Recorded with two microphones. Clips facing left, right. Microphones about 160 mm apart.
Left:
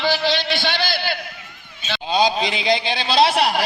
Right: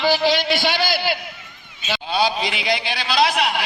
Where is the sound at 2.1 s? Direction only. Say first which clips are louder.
Left 3 dB; 20° left (ahead or behind); by 3.6 s 35° left (ahead or behind).